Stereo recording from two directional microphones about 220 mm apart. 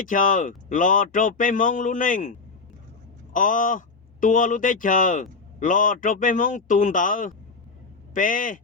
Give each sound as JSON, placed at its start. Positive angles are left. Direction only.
{"t": 0.0, "sound": "speech", "side_deg": 40}
{"t": 3.3, "sound": "speech", "side_deg": 35}